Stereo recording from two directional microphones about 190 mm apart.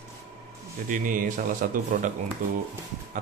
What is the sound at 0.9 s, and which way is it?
Speech, 45° right (ahead or behind).